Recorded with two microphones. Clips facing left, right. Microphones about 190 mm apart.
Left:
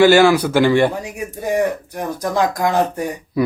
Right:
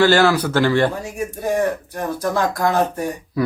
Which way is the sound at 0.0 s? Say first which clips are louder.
Left 4 dB; 10° left (ahead or behind).